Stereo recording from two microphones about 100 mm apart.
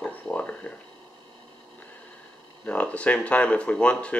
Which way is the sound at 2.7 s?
10° left (ahead or behind).